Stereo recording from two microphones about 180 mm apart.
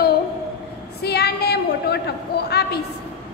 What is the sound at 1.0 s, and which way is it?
A woman's voice, 65° left (ahead or behind).